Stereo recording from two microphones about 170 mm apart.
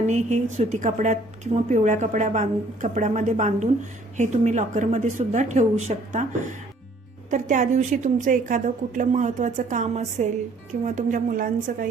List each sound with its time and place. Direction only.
0.1 s a woman's voice: 45° right (ahead or behind)
7.3 s a woman's voice: 45° right (ahead or behind)